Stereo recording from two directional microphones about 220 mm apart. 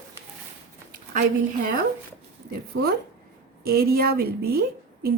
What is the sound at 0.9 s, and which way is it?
Speech, 40° right (ahead or behind).